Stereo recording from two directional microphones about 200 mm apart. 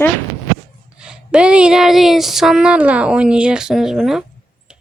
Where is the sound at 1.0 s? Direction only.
5° right (ahead or behind).